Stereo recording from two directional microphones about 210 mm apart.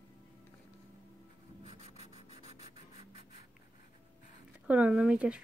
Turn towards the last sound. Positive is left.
turn(degrees=-5)  # may be behind; listen again after turning